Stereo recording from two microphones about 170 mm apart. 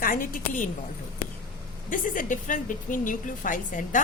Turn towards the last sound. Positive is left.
turn(degrees=50)  # may be behind; listen again after turning